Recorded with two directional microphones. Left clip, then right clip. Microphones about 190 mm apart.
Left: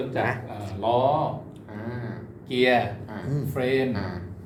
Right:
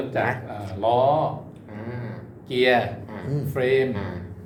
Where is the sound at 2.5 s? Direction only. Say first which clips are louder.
Right 2 dB; 20° right (ahead or behind).